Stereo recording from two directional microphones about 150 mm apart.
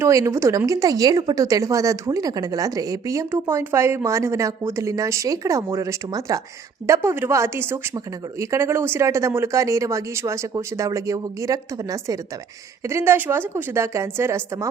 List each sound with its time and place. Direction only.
0.0 s a woman's voice: 20° right (ahead or behind)